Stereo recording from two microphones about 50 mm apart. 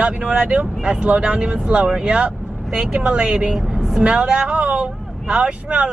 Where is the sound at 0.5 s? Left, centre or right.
Right.